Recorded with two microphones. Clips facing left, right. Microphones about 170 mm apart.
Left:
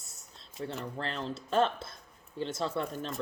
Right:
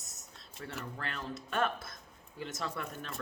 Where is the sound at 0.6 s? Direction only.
25° left (ahead or behind).